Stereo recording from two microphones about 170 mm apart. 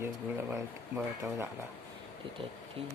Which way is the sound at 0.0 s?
15° right (ahead or behind).